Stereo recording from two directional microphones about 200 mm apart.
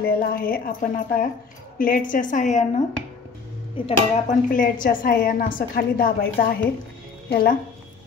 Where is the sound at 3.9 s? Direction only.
40° left (ahead or behind).